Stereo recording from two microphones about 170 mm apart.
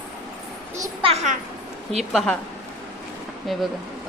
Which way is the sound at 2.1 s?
Centre (ahead or behind).